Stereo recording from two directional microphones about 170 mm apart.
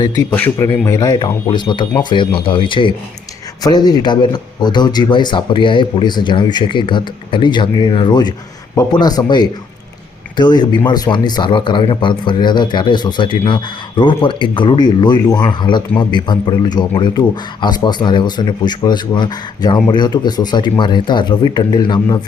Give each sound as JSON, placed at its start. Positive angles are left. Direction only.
{"t": 0.0, "sound": "a man's voice", "side_deg": 15}